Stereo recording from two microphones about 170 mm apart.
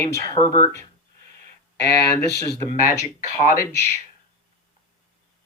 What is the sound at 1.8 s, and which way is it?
Speech, 80° left.